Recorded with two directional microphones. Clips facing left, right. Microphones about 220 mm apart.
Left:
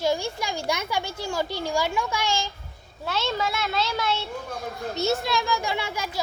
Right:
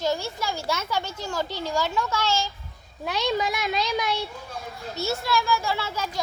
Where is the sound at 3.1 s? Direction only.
15° right (ahead or behind).